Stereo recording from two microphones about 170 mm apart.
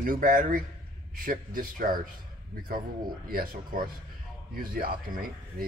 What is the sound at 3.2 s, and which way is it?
A man's voice, 55° right (ahead or behind).